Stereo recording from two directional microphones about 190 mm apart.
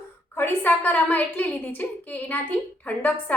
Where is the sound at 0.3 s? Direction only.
10° left (ahead or behind).